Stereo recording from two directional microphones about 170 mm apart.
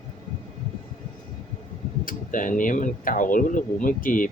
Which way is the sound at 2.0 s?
50° left (ahead or behind).